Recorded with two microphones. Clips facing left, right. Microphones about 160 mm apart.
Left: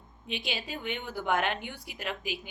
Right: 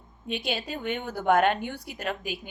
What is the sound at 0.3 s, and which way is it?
A woman's voice, 45° right (ahead or behind).